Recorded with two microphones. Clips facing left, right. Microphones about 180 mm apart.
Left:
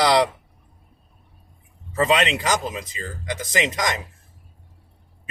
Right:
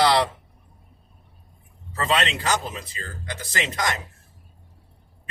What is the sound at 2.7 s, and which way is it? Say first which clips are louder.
Speech: left 4 dB; 15° left (ahead or behind).